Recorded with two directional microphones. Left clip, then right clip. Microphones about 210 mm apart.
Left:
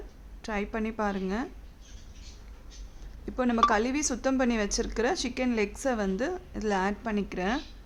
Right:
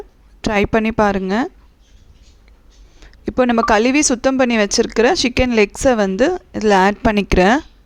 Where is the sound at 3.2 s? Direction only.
40° right (ahead or behind).